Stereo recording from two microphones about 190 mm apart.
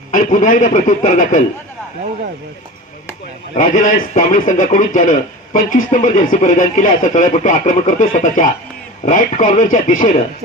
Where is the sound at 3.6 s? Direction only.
45° left (ahead or behind).